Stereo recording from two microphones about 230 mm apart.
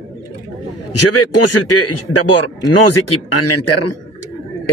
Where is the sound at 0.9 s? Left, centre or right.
Left.